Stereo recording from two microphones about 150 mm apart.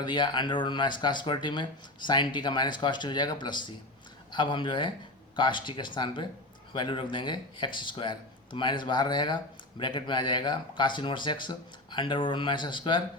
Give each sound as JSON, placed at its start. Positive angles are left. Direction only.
{"t": 0.0, "sound": "speech", "side_deg": 30}